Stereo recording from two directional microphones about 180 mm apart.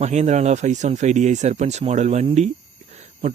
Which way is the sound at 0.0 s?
40° right (ahead or behind).